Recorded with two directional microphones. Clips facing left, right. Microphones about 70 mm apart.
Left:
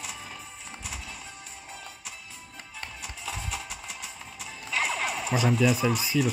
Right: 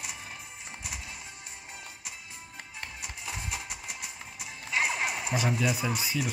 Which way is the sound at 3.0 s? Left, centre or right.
Right.